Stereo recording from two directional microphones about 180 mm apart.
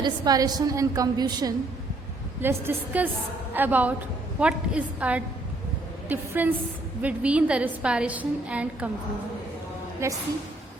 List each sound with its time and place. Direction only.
0.0 s a woman's voice: 20° right (ahead or behind)
10.0 s a woman's voice: 15° right (ahead or behind)